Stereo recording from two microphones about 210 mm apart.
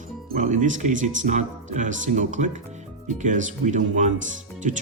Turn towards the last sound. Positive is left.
turn(degrees=-35)  # may be behind; listen again after turning